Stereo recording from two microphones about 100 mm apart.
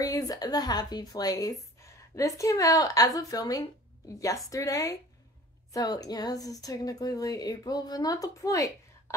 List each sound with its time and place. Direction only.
0.0 s speech: 35° left (ahead or behind)